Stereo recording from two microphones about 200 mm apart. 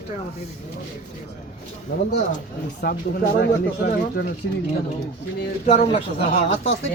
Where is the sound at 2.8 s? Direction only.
50° left (ahead or behind).